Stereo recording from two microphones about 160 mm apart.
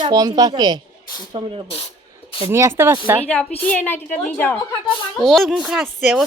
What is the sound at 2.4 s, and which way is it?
Speech, 15° right (ahead or behind).